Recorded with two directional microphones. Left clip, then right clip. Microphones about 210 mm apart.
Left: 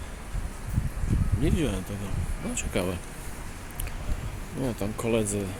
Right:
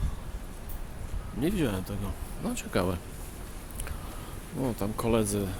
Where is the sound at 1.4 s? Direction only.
15° right (ahead or behind).